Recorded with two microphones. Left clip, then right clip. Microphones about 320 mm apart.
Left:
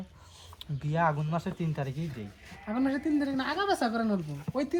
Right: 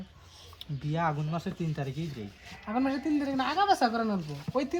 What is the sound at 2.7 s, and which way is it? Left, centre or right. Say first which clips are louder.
A woman's voice: even; centre.